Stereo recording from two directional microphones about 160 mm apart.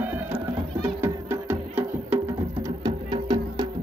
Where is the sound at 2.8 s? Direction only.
25° right (ahead or behind).